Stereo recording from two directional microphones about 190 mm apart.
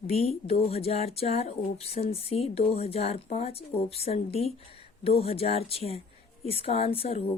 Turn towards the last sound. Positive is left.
turn(degrees=30)  # may be behind; listen again after turning